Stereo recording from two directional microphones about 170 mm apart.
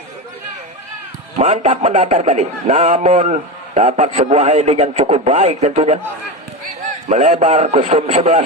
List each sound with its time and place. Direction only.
1.4 s a man's voice: 40° right (ahead or behind)
7.1 s a man's voice: 45° right (ahead or behind)